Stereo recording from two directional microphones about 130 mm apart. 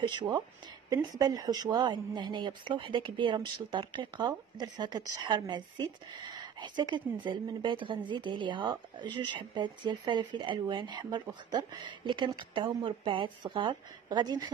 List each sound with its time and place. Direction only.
0.0 s a woman's voice: 35° right (ahead or behind)